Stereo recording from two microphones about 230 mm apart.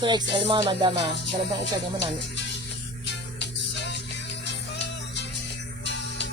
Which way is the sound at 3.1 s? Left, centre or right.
Left.